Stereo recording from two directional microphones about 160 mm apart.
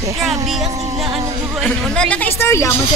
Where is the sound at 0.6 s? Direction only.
40° right (ahead or behind).